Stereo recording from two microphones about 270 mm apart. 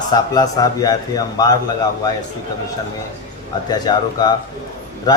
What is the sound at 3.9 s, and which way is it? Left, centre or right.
Speech, centre.